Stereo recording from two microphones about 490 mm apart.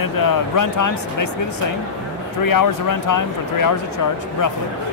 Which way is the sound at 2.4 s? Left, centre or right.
Left.